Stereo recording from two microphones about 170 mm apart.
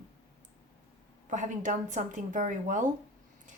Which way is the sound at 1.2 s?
45° right (ahead or behind).